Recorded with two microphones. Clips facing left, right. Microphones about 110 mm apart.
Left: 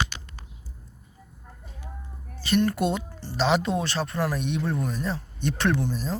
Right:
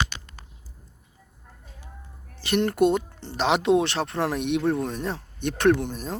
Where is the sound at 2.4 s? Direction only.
60° right (ahead or behind).